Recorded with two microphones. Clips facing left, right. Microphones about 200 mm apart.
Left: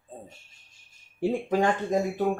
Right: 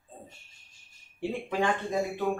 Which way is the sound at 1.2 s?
40° left (ahead or behind).